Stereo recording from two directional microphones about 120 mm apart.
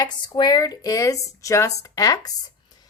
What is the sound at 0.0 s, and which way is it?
A woman's voice, 35° left (ahead or behind).